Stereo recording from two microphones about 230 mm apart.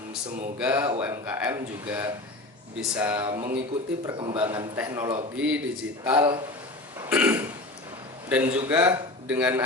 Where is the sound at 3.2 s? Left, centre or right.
Right.